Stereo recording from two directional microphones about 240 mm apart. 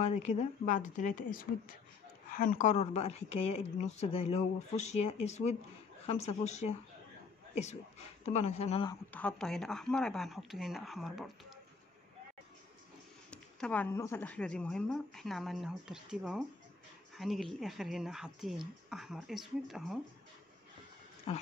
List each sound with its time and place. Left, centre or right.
0.0 s speech: left
8.3 s speech: left
9.1 s speech: centre
13.3 s speech: centre